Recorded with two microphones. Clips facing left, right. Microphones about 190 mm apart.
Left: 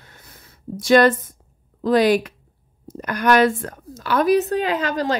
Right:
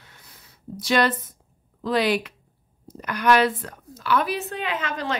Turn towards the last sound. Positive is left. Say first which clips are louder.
# left 6 dB
turn(degrees=35)  # may be behind; listen again after turning